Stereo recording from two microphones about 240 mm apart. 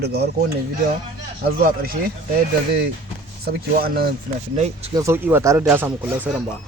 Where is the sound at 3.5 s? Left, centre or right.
Right.